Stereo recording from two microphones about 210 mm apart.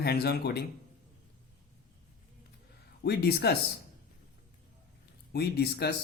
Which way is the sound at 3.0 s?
50° left (ahead or behind).